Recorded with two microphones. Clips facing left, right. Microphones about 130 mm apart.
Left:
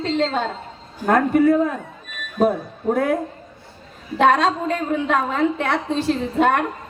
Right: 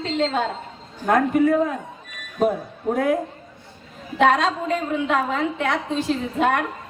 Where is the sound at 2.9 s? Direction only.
35° left (ahead or behind).